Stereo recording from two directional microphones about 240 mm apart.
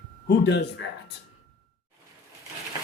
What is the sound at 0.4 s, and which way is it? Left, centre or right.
Speech, left.